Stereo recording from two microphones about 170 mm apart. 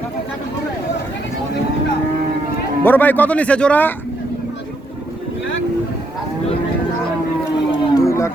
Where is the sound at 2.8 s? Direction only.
10° left (ahead or behind).